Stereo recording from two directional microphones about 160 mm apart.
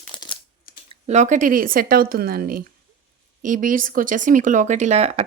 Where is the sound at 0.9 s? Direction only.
45° right (ahead or behind).